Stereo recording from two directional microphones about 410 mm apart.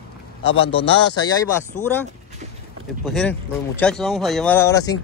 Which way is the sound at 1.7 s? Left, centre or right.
Left.